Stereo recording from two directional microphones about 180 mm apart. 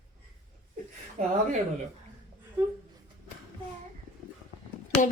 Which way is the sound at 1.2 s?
40° right (ahead or behind).